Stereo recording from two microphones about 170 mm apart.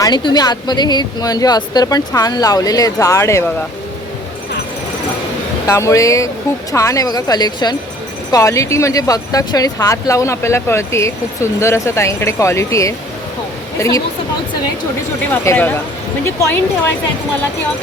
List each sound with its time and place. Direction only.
0.0 s speech: 25° left (ahead or behind)
5.6 s speech: 15° left (ahead or behind)
15.4 s speech: 10° left (ahead or behind)